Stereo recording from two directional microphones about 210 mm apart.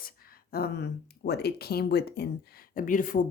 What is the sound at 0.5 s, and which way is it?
Speech, 45° left (ahead or behind).